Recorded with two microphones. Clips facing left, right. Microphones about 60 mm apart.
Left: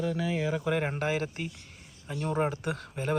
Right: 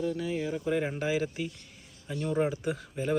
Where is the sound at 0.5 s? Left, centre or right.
Left.